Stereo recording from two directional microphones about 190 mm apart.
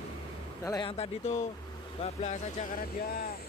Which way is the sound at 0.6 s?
20° left (ahead or behind).